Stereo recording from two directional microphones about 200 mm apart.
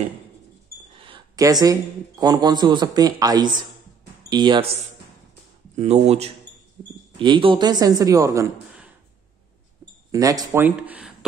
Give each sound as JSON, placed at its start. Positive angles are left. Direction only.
{"t": 0.9, "sound": "speech", "side_deg": -25}
{"t": 5.8, "sound": "speech", "side_deg": -35}
{"t": 10.1, "sound": "speech", "side_deg": -20}